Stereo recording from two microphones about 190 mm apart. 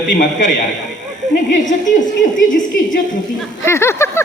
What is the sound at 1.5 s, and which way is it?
A woman's voice, 40° left (ahead or behind).